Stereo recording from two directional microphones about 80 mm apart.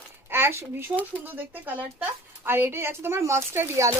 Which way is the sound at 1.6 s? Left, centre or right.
Right.